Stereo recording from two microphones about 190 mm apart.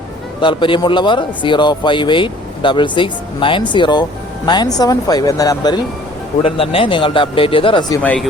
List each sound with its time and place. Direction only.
0.4 s speech: 25° left (ahead or behind)
6.4 s speech: 30° left (ahead or behind)
8.0 s speech: 5° left (ahead or behind)